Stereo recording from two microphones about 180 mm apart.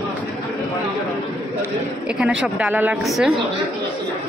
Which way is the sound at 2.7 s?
15° right (ahead or behind).